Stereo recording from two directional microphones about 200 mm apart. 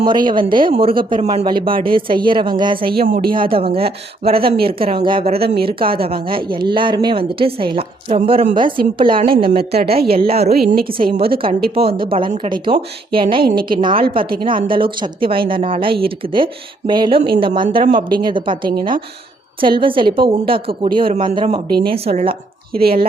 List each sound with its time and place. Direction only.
0.0 s a woman's voice: 25° right (ahead or behind)
2.9 s a woman's voice: 50° right (ahead or behind)
3.3 s a woman's voice: 25° right (ahead or behind)
9.6 s a woman's voice: 50° right (ahead or behind)
11.1 s a woman's voice: 25° right (ahead or behind)
22.8 s a woman's voice: 50° right (ahead or behind)